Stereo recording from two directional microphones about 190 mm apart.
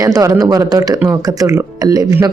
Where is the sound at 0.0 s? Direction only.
15° right (ahead or behind).